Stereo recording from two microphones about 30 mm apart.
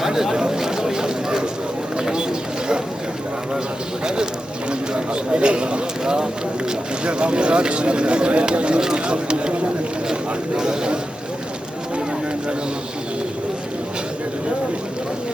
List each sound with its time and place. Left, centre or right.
0.0 s chatter: centre
2.0 s bird: right
4.0 s a sound: right
4.7 s clip-clop: right
7.0 s speech: right
10.1 s a sound: right